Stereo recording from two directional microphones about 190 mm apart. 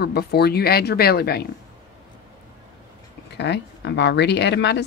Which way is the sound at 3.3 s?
65° left (ahead or behind).